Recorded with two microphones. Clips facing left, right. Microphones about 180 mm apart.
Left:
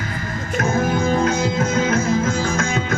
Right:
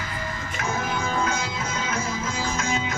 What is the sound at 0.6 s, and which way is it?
Music, 45° left (ahead or behind).